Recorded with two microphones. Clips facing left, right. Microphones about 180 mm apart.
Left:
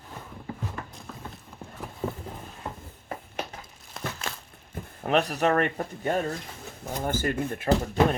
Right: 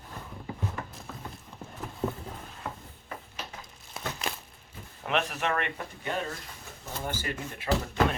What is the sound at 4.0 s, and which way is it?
Crumpling, centre (ahead or behind).